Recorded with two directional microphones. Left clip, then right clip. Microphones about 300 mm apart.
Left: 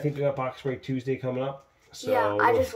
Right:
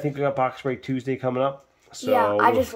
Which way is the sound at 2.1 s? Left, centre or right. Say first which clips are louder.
Right 4 dB; right.